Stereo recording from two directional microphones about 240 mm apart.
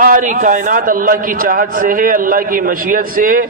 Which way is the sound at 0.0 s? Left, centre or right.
Right.